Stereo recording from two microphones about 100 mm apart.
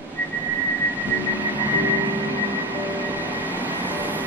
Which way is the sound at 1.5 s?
15° right (ahead or behind).